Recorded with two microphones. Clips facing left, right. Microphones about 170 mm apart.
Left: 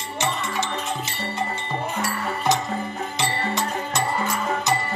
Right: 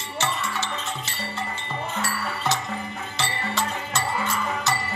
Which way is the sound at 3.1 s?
15° left (ahead or behind).